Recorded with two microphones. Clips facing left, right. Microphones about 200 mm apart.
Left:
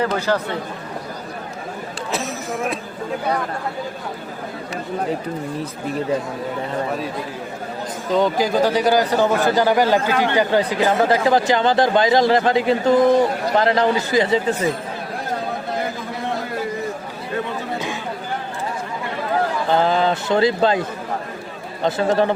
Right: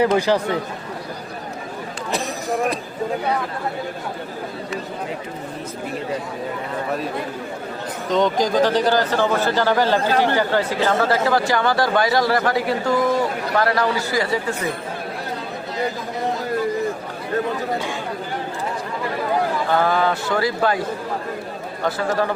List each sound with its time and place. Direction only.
0.0 s speech: 15° right (ahead or behind)
2.1 s chatter: centre (ahead or behind)
8.1 s speech: 5° left (ahead or behind)
10.0 s speech: 35° right (ahead or behind)
10.3 s speech: 15° left (ahead or behind)
19.7 s speech: 20° left (ahead or behind)
21.8 s speech: 25° left (ahead or behind)